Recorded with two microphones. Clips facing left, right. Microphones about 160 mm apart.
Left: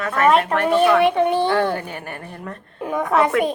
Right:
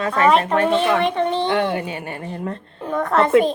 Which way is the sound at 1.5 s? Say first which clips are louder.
Even; 20° right (ahead or behind).